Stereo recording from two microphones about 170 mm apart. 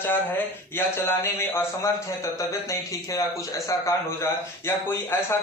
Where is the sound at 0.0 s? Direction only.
10° left (ahead or behind).